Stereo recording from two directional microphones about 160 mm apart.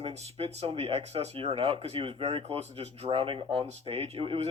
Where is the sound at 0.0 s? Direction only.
40° right (ahead or behind).